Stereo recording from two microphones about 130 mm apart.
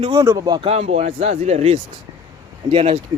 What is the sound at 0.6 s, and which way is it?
Speech, 50° right (ahead or behind).